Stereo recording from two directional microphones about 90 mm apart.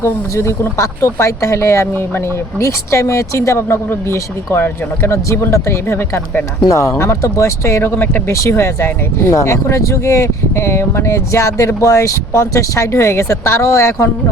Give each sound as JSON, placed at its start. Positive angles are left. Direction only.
{"t": 0.0, "sound": "speech", "side_deg": 25}
{"t": 8.3, "sound": "speech", "side_deg": 30}